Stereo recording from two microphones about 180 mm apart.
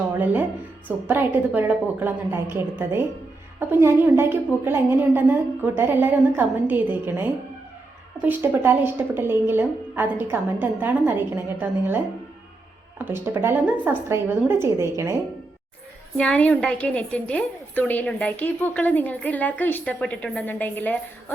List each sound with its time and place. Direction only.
0.9 s a woman's voice: 10° right (ahead or behind)
13.1 s a woman's voice: 10° right (ahead or behind)
16.1 s a woman's voice: 5° left (ahead or behind)